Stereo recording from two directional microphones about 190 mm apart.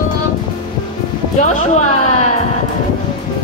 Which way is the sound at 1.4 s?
40° left (ahead or behind).